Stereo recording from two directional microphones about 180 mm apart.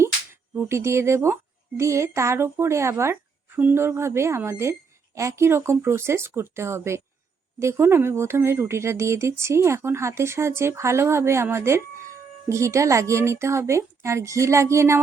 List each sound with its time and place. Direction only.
0.5 s speech: 15° right (ahead or behind)